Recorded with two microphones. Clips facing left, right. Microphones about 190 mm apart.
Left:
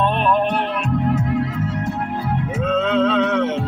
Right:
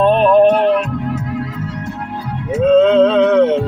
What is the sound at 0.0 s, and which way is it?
Music, 40° right (ahead or behind).